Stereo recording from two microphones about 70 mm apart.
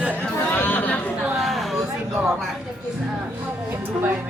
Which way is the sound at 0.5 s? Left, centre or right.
Left.